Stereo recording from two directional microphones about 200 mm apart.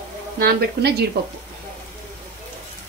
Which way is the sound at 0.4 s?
50° right (ahead or behind).